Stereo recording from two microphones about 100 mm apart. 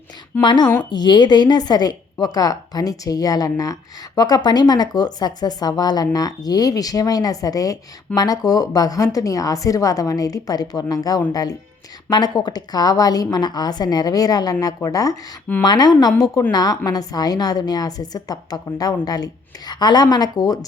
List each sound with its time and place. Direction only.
0.4 s speech: 45° left (ahead or behind)